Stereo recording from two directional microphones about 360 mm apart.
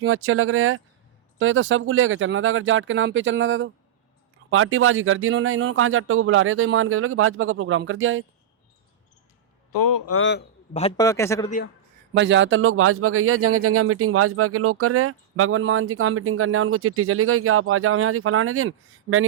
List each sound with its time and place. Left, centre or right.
0.0 s a man's voice: right
9.7 s a man's voice: left
10.1 s a man's voice: left
10.8 s a man's voice: centre
12.1 s a man's voice: right